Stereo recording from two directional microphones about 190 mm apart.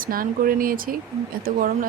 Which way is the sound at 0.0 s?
50° right (ahead or behind).